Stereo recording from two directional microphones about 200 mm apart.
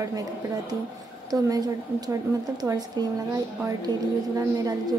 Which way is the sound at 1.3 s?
20° right (ahead or behind).